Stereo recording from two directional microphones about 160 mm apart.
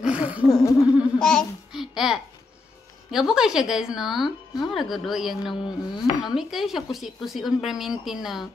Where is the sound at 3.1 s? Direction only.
5° right (ahead or behind).